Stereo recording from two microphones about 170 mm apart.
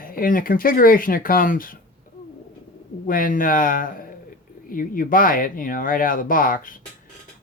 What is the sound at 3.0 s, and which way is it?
Speech, 55° left (ahead or behind).